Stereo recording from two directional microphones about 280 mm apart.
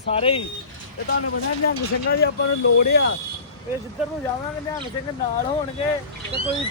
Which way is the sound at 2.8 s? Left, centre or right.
Left.